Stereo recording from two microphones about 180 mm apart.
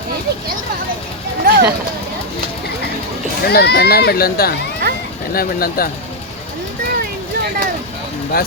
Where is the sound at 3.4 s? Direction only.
65° left (ahead or behind).